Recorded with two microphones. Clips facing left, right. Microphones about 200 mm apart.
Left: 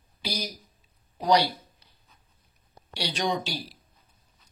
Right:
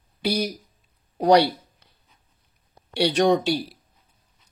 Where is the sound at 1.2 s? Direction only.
60° right (ahead or behind).